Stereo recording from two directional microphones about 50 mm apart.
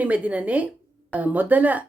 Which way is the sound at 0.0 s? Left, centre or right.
Right.